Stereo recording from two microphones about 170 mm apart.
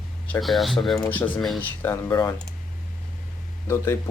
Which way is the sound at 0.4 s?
Centre (ahead or behind).